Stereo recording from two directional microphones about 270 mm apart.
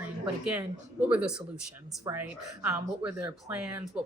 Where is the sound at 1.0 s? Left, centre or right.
Centre.